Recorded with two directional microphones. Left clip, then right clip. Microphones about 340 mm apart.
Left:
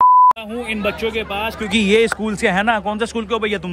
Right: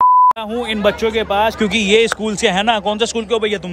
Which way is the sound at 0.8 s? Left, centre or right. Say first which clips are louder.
Right 6 dB; right.